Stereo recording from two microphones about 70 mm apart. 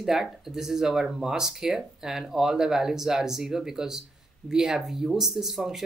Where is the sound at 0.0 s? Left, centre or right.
Centre.